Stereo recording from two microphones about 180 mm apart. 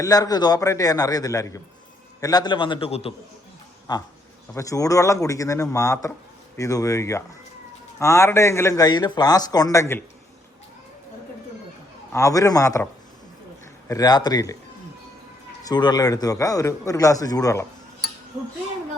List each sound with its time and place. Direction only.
0.0 s speech: 20° left (ahead or behind)
12.1 s speech: 20° left (ahead or behind)
15.6 s speech: 25° left (ahead or behind)